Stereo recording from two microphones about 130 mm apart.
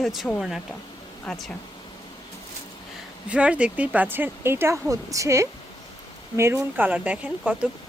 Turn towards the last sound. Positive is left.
turn(degrees=-10)  # may be behind; listen again after turning